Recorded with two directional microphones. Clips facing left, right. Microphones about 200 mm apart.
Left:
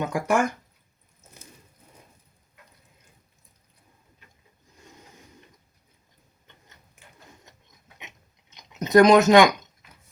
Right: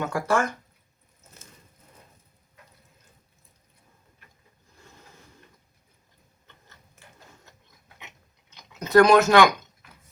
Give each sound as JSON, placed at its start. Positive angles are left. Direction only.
{"t": 0.0, "sound": "speech", "side_deg": 15}
{"t": 7.9, "sound": "chewing", "side_deg": 20}